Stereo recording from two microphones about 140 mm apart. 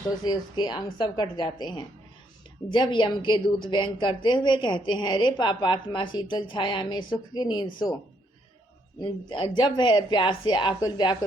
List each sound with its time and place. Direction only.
0.3 s a woman's voice: 30° left (ahead or behind)
9.0 s a woman's voice: 35° left (ahead or behind)